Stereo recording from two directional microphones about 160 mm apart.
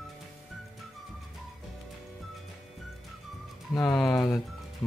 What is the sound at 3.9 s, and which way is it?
Music, 5° left (ahead or behind).